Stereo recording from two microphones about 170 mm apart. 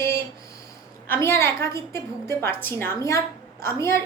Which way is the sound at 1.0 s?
15° left (ahead or behind).